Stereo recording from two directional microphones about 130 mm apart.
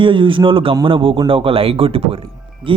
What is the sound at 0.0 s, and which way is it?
A man's voice, 40° right (ahead or behind).